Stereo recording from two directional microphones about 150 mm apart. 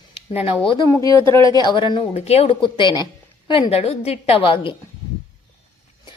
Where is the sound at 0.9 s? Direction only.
20° left (ahead or behind).